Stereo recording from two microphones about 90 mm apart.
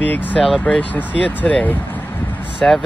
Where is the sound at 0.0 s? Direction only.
20° left (ahead or behind).